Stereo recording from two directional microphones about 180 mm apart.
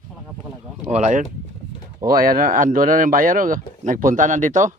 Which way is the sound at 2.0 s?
50° right (ahead or behind).